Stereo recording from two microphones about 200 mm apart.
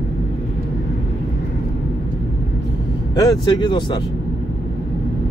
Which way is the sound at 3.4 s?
20° left (ahead or behind).